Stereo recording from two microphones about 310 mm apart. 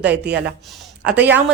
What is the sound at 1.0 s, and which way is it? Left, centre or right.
Speech, centre.